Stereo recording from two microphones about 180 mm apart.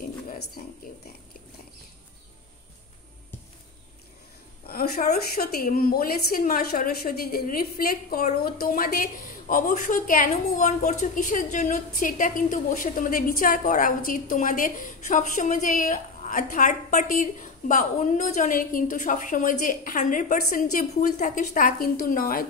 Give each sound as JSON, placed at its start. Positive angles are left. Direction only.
{"t": 4.6, "sound": "a woman's voice", "side_deg": 55}